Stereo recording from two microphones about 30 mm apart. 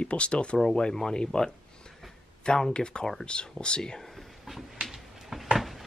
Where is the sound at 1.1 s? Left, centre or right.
Left.